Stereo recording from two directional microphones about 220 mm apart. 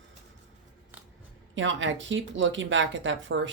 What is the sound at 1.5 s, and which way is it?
Speech, 60° right (ahead or behind).